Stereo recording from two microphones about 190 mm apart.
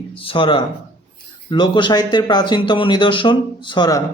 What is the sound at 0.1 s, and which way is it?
Speech, 30° left (ahead or behind).